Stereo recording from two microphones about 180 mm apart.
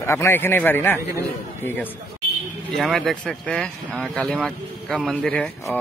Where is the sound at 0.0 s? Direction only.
15° left (ahead or behind).